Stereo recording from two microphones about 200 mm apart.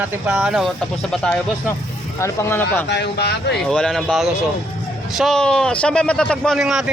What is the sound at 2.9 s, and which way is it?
Speech, 55° left (ahead or behind).